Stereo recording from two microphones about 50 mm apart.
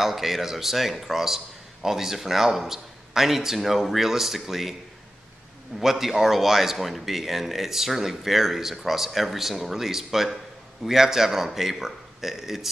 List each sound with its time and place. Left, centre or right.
0.0 s a man's voice: centre
5.8 s a man's voice: centre